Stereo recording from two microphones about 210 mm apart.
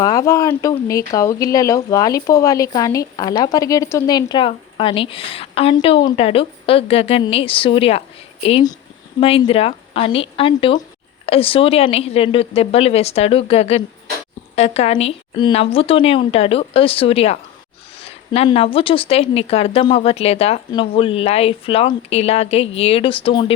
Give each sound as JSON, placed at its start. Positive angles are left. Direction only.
{"t": 0.0, "sound": "a woman's voice", "side_deg": 15}